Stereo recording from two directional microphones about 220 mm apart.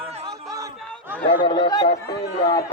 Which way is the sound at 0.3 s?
15° right (ahead or behind).